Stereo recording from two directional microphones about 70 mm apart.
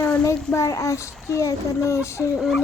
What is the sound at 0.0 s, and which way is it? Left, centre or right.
A child's voice, left.